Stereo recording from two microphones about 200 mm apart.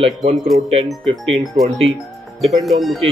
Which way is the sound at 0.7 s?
30° right (ahead or behind).